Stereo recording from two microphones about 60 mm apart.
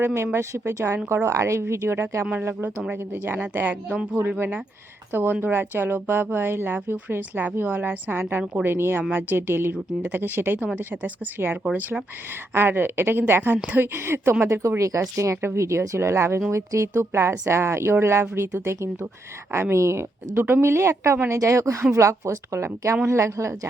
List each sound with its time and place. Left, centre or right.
0.0 s a woman's voice: right
0.9 s a woman's voice: right
3.8 s speech: right
4.2 s a woman's voice: right
14.4 s a woman's voice: right
20.3 s a woman's voice: right
20.7 s a woman's voice: right